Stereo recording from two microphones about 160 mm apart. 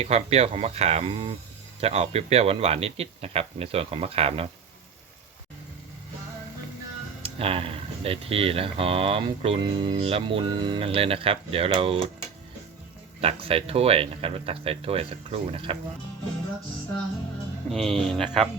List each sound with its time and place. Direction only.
0.0 s speech: 40° right (ahead or behind)
7.2 s speech: 35° right (ahead or behind)
13.2 s speech: 35° right (ahead or behind)
17.7 s speech: 5° left (ahead or behind)